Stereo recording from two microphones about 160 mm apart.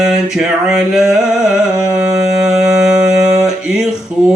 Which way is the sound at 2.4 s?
5° right (ahead or behind).